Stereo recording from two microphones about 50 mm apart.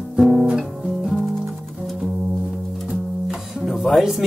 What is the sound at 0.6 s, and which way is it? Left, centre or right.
Music, centre.